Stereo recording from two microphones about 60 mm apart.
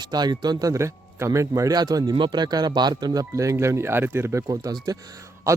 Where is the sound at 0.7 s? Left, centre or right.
Right.